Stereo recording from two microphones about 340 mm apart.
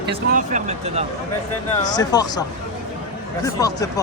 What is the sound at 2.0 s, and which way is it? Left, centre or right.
Speech, centre.